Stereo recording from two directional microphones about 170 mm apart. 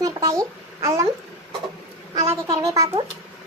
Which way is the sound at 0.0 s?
20° right (ahead or behind).